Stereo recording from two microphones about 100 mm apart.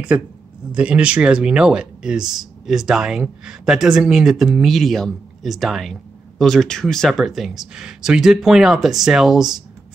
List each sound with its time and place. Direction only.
0.1 s speech: 15° right (ahead or behind)